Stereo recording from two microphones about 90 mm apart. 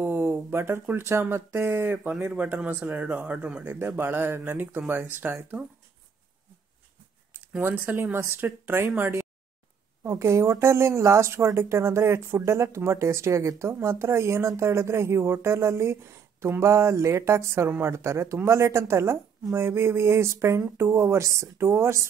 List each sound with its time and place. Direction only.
0.0 s speech: 25° right (ahead or behind)
7.3 s speech: 20° right (ahead or behind)